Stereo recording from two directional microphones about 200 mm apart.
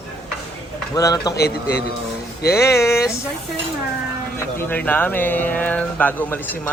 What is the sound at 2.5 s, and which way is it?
Speech, 15° left (ahead or behind).